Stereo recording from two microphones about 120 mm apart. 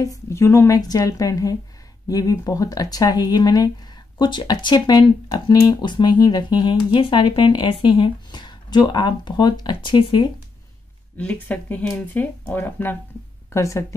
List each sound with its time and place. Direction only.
0.0 s a woman's voice: 25° left (ahead or behind)
11.1 s a woman's voice: 10° left (ahead or behind)